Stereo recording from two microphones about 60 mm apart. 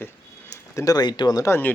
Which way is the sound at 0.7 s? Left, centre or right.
Left.